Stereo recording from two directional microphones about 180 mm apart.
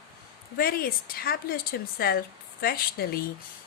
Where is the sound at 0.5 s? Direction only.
55° left (ahead or behind).